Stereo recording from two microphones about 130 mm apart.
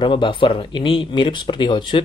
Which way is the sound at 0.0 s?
40° left (ahead or behind).